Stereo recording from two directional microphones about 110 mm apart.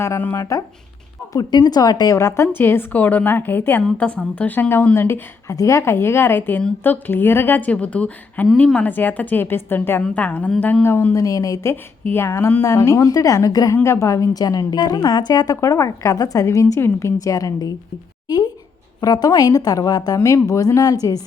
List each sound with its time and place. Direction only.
0.0 s a woman's voice: 20° left (ahead or behind)
1.3 s a woman's voice: 40° left (ahead or behind)
18.9 s a woman's voice: 35° left (ahead or behind)